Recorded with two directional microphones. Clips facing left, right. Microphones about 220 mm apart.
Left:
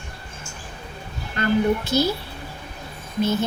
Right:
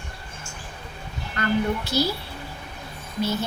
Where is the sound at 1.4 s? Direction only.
20° left (ahead or behind).